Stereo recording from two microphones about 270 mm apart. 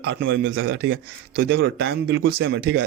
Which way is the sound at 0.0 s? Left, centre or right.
Right.